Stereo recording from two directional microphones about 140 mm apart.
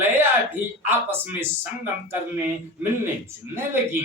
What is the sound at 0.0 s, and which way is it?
A man's voice, 15° right (ahead or behind).